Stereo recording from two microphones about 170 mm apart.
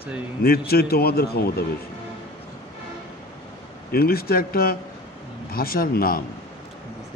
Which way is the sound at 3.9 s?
65° left (ahead or behind).